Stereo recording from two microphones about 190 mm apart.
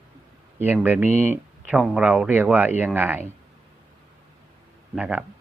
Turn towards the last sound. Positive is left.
turn(degrees=-5)  # may be behind; listen again after turning